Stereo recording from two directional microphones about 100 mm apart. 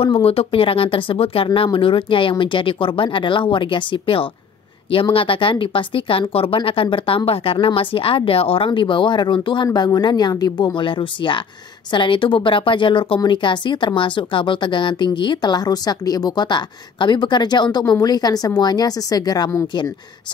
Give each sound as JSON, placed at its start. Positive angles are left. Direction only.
{"t": 0.0, "sound": "speech", "side_deg": 75}
{"t": 9.8, "sound": "a woman's voice", "side_deg": 40}